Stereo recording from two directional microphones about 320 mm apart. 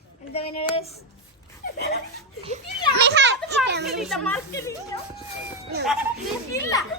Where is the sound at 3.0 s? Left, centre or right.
Right.